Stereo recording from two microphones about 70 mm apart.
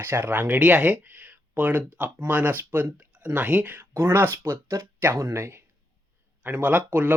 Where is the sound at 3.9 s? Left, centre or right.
Right.